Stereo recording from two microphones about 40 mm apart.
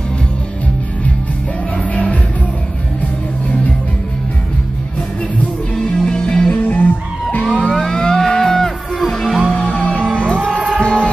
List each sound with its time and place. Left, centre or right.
5.9 s music: left
6.5 s music: left
7.4 s vehicle: left
7.7 s music: centre
9.5 s music: left